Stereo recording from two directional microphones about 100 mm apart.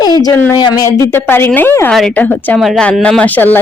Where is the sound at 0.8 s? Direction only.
30° left (ahead or behind).